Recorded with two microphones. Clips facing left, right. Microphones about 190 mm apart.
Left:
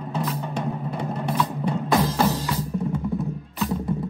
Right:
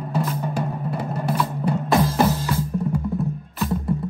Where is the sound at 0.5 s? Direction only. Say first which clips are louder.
Right 1 dB; 5° right (ahead or behind).